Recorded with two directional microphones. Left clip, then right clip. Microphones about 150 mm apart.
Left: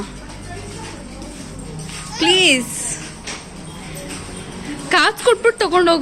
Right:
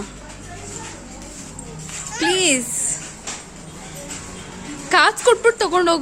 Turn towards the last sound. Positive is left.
turn(degrees=-10)  # may be behind; listen again after turning